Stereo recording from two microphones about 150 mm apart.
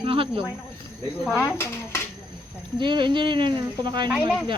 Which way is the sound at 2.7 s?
30° right (ahead or behind).